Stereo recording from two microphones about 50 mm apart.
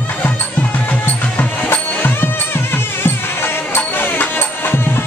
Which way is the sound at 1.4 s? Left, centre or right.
Left.